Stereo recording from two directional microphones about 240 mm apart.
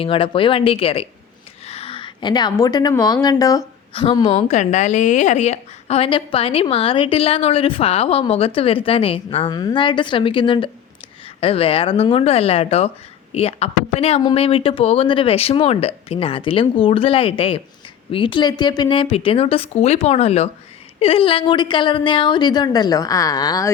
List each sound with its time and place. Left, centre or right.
0.0 s a woman's voice: left